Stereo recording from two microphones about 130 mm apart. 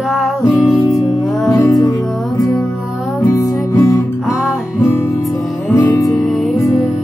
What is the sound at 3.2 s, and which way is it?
Music, 25° left (ahead or behind).